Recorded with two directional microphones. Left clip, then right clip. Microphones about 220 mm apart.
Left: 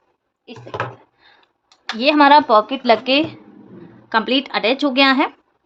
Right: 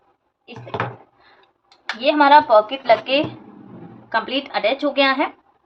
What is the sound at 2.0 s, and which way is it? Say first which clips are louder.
A woman's voice: left 1 dB; 55° left (ahead or behind).